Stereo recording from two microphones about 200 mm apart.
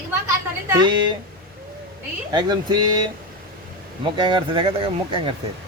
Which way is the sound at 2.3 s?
20° right (ahead or behind).